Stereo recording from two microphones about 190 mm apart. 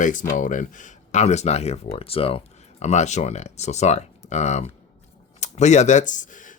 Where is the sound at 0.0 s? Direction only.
45° left (ahead or behind).